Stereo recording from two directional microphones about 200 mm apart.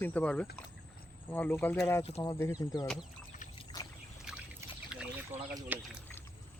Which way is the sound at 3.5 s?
20° left (ahead or behind).